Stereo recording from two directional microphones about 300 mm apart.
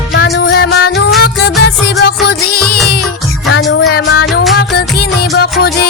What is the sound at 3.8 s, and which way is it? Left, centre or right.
Music, left.